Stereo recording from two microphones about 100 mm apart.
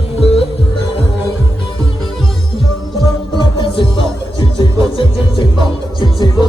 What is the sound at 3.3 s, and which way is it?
Music, 55° left (ahead or behind).